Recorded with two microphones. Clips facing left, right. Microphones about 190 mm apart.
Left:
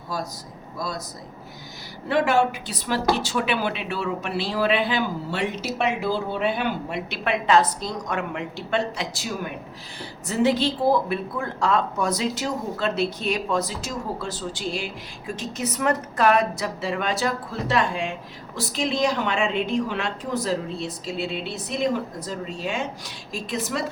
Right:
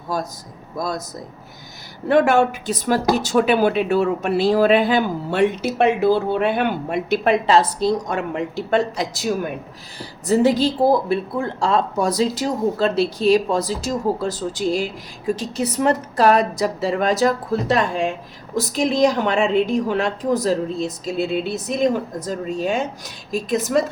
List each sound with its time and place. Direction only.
0.8 s speech: 45° right (ahead or behind)
2.0 s speech: 50° right (ahead or behind)
10.2 s a woman's voice: 40° right (ahead or behind)